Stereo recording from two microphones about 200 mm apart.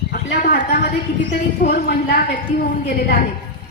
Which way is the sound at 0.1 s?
50° left (ahead or behind).